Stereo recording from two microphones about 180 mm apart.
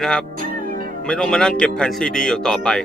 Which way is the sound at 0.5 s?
50° right (ahead or behind).